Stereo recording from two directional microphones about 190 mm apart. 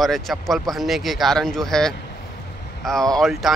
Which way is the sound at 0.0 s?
Centre (ahead or behind).